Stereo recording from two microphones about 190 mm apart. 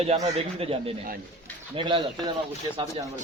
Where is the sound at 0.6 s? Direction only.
30° right (ahead or behind).